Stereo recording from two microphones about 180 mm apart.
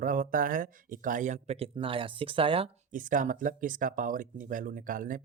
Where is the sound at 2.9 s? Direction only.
45° right (ahead or behind).